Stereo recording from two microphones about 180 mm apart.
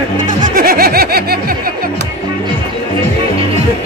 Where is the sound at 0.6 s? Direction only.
55° right (ahead or behind).